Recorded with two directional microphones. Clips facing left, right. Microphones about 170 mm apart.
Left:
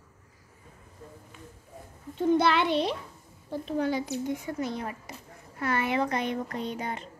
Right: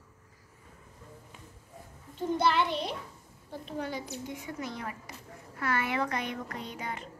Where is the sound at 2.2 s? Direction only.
75° left (ahead or behind).